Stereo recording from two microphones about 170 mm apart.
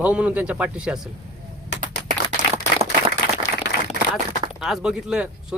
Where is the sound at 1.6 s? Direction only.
90° left.